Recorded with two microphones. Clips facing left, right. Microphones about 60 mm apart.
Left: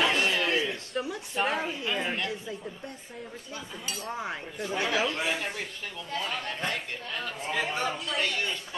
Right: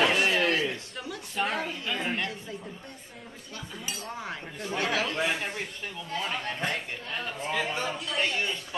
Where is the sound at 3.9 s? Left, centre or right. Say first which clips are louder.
Left 2 dB; centre.